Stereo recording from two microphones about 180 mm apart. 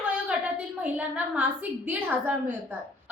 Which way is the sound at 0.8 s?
5° right (ahead or behind).